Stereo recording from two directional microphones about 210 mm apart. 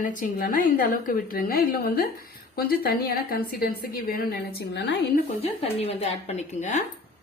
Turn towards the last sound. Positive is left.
turn(degrees=35)  # may be behind; listen again after turning